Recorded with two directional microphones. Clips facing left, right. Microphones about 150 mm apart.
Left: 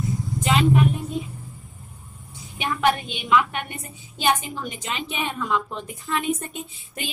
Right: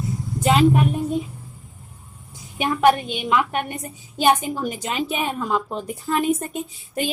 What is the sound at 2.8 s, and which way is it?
A woman's voice, 45° right (ahead or behind).